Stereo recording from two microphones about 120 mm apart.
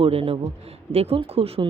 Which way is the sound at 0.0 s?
50° right (ahead or behind).